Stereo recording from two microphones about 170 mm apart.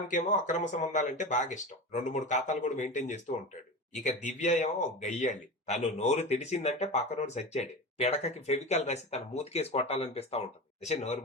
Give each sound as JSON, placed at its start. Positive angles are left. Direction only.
{"t": 0.1, "sound": "speech", "side_deg": 45}